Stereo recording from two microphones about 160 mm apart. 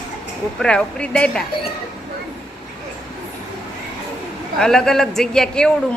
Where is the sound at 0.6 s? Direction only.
5° left (ahead or behind).